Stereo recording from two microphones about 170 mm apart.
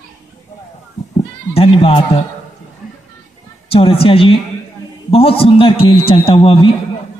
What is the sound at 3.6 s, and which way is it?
Speech, 35° left (ahead or behind).